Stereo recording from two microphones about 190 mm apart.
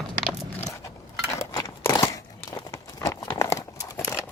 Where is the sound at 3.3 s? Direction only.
15° left (ahead or behind).